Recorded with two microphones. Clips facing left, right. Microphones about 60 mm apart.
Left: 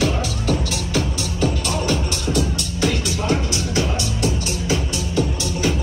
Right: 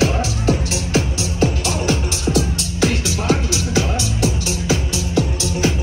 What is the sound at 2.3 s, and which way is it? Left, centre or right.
Music, right.